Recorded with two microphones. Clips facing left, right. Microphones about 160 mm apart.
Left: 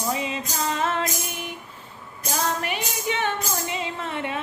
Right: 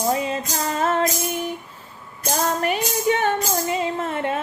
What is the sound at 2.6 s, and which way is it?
Music, 45° right (ahead or behind).